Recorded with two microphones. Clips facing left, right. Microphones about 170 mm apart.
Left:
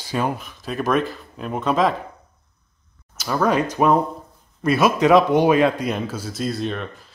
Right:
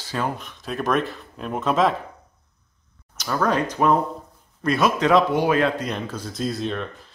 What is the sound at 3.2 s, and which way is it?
A man's voice, 10° left (ahead or behind).